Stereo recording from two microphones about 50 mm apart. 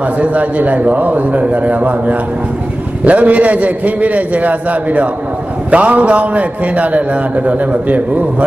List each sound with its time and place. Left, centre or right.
0.0 s a man's voice: right